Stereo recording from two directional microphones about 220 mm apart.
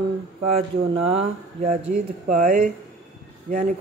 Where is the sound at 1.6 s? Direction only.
30° right (ahead or behind).